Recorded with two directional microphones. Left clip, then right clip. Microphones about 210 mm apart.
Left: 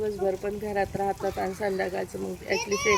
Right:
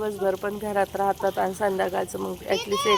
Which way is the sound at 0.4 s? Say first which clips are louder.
Right 2 dB; 45° right (ahead or behind).